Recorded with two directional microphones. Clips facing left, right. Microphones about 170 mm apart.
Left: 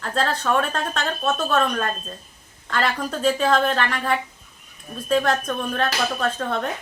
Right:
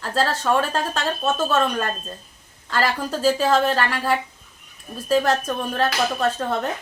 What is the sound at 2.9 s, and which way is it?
Speech, 5° right (ahead or behind).